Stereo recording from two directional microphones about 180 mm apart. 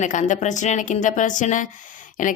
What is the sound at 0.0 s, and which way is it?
A woman's voice, 45° left (ahead or behind).